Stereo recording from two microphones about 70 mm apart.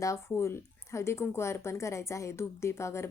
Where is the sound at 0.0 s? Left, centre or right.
Left.